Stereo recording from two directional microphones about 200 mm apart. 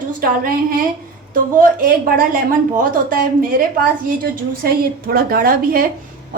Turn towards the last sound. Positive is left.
turn(degrees=-45)  # may be behind; listen again after turning